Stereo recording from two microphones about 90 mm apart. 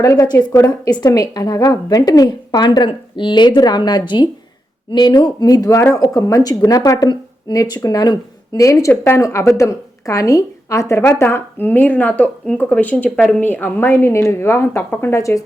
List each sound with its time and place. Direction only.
0.3 s a woman's voice: 50° left (ahead or behind)
8.6 s speech: 35° left (ahead or behind)
8.9 s a woman's voice: 25° left (ahead or behind)
9.2 s a woman's voice: 35° left (ahead or behind)
15.1 s speech: 35° left (ahead or behind)